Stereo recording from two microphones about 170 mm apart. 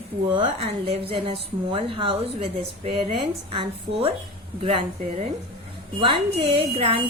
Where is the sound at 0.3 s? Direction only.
30° right (ahead or behind).